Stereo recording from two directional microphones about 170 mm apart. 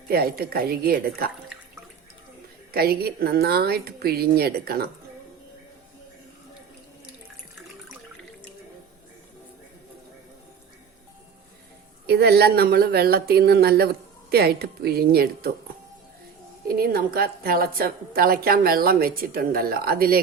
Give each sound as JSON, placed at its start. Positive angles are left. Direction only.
{"t": 0.1, "sound": "a woman's voice", "side_deg": -65}
{"t": 2.7, "sound": "a woman's voice", "side_deg": -65}
{"t": 12.0, "sound": "speech", "side_deg": -70}
{"t": 16.6, "sound": "a woman's voice", "side_deg": -60}